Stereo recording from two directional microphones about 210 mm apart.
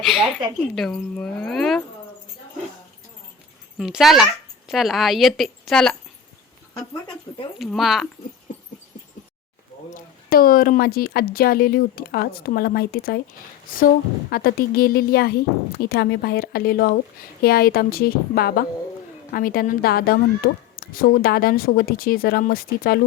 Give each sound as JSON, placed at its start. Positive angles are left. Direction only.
{"t": 0.8, "sound": "a woman's voice", "side_deg": 5}
{"t": 3.8, "sound": "a woman's voice", "side_deg": 0}
{"t": 6.7, "sound": "speech", "side_deg": 20}
{"t": 7.6, "sound": "a woman's voice", "side_deg": 0}
{"t": 9.9, "sound": "a woman's voice", "side_deg": 45}